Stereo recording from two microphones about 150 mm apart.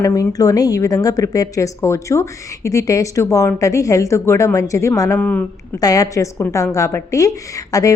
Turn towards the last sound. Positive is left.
turn(degrees=25)  # may be behind; listen again after turning